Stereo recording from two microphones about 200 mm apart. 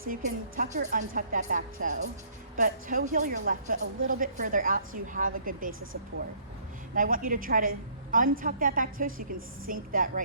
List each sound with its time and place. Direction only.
0.1 s a woman's voice: 40° right (ahead or behind)
6.9 s a woman's voice: 45° right (ahead or behind)